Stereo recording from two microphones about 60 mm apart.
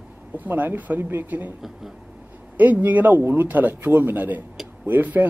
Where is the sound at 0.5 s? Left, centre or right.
Right.